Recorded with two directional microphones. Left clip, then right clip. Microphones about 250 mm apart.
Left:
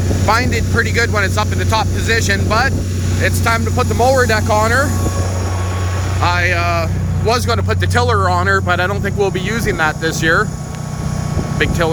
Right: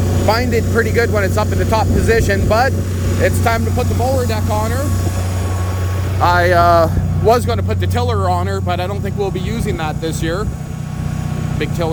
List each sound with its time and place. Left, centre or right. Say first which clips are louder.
0.3 s speech: left 1 dB; centre
6.2 s speech: right 5 dB; right
7.3 s speech: right 2 dB; centre